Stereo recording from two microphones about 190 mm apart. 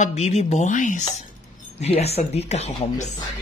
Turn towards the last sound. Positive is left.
turn(degrees=35)  # may be behind; listen again after turning